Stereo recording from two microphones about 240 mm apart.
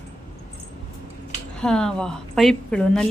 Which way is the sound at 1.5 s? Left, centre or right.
Centre.